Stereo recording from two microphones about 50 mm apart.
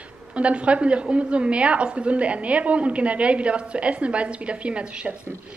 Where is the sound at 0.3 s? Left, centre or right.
Right.